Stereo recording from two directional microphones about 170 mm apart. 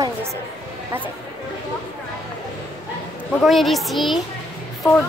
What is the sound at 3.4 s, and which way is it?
Speech, centre (ahead or behind).